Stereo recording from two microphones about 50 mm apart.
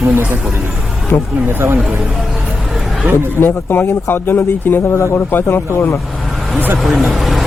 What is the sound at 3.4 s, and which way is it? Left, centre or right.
A man's voice, left.